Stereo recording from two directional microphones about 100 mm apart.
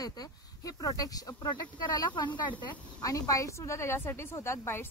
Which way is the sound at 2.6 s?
35° left (ahead or behind).